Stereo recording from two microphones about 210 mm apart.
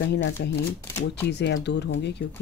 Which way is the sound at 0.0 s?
55° left (ahead or behind).